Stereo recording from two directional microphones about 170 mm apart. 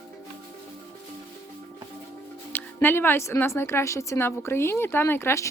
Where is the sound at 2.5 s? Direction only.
10° left (ahead or behind).